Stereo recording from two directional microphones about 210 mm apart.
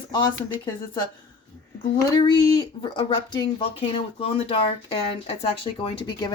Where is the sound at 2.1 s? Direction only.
20° left (ahead or behind).